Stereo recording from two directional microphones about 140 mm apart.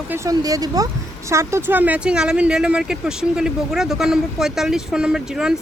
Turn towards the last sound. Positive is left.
turn(degrees=-5)  # may be behind; listen again after turning